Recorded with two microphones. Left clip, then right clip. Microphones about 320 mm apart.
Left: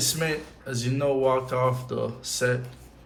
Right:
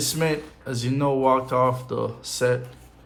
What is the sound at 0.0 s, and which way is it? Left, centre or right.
Speech, centre.